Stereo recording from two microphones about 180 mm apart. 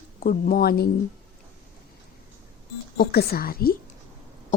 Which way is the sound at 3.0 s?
60° left (ahead or behind).